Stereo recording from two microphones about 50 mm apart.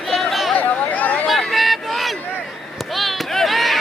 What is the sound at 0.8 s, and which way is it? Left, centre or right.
Chatter, left.